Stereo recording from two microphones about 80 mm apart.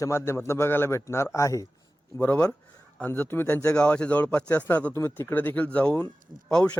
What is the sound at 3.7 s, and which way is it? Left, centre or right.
A man's voice, centre.